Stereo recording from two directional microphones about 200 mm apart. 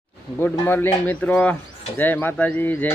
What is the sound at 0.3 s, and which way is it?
Speech, 10° left (ahead or behind).